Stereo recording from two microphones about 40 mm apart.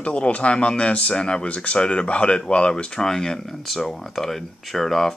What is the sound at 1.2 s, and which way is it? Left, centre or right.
Speech, left.